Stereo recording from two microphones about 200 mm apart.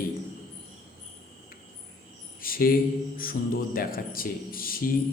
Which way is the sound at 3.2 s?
45° left (ahead or behind).